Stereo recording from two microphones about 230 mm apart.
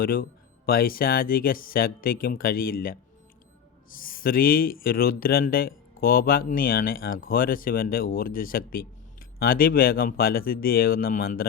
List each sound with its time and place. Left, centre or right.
0.0 s speech: left